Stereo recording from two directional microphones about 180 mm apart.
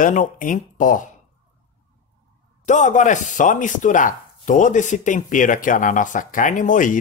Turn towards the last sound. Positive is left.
turn(degrees=45)  # may be behind; listen again after turning